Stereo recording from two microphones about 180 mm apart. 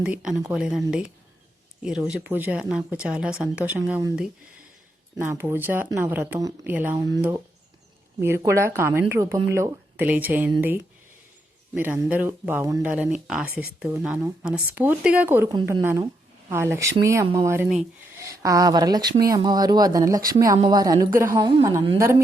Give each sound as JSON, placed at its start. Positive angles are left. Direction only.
{"t": 0.0, "sound": "speech", "side_deg": -5}
{"t": 5.2, "sound": "speech", "side_deg": -10}
{"t": 11.7, "sound": "speech", "side_deg": -10}